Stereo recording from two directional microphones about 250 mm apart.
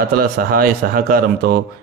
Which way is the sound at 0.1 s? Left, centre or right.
Right.